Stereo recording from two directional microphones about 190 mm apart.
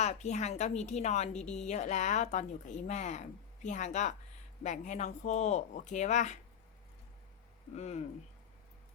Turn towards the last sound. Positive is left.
turn(degrees=35)  # may be behind; listen again after turning